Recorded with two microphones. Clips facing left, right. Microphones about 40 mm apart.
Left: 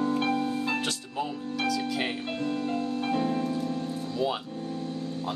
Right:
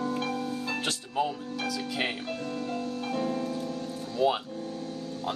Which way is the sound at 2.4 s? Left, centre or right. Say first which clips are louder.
Left 7 dB; left.